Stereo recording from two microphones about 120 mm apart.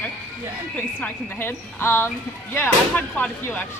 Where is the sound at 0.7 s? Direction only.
15° left (ahead or behind).